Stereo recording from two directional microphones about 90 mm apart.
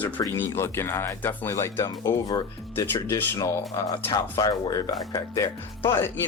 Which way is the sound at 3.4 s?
40° left (ahead or behind).